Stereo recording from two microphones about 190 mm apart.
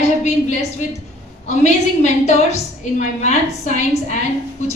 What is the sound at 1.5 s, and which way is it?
A woman's voice, 35° left (ahead or behind).